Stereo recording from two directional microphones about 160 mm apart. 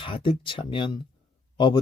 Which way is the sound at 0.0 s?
35° left (ahead or behind).